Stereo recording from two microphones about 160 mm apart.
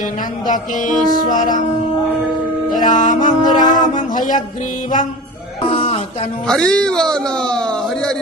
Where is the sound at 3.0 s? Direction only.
55° left (ahead or behind).